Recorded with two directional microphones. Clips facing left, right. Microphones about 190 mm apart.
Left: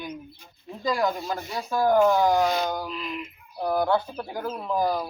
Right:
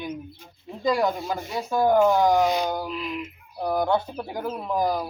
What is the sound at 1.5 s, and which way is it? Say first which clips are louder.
Speech: right 1 dB; 20° right (ahead or behind).